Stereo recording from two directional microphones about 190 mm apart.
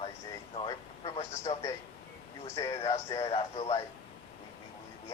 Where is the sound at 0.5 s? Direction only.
30° left (ahead or behind).